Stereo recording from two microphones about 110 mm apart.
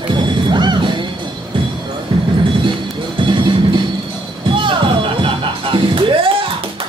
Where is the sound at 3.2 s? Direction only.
45° right (ahead or behind).